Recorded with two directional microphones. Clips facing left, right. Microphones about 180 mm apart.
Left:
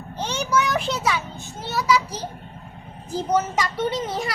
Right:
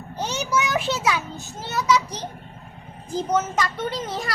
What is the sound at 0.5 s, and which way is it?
A child's voice, 5° right (ahead or behind).